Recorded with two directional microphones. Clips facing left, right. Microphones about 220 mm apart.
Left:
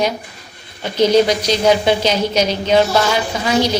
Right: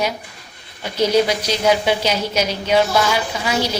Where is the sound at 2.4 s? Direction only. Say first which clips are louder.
Left 2 dB; 35° left (ahead or behind).